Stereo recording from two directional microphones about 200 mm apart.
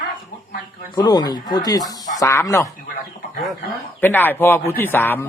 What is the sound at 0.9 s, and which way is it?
Speech, 20° left (ahead or behind).